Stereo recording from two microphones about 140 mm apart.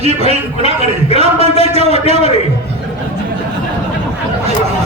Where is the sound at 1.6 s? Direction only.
45° right (ahead or behind).